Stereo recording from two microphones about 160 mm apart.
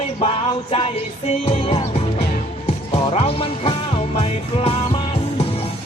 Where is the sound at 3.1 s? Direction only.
35° left (ahead or behind).